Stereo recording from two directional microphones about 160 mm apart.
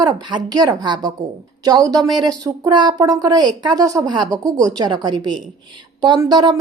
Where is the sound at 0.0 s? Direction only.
25° right (ahead or behind).